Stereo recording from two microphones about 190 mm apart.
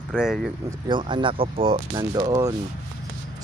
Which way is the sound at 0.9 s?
25° right (ahead or behind).